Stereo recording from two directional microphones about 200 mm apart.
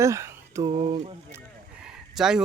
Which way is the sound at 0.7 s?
30° right (ahead or behind).